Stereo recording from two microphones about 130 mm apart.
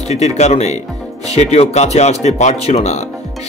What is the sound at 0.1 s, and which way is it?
Speech, 55° left (ahead or behind).